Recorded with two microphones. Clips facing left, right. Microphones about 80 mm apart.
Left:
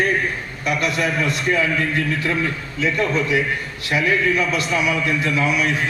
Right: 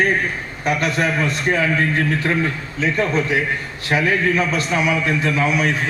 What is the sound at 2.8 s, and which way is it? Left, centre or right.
A man's voice, right.